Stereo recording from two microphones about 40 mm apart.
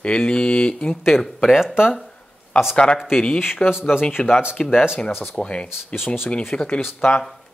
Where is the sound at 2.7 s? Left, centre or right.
Left.